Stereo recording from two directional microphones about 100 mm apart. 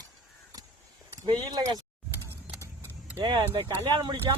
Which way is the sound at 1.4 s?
45° right (ahead or behind).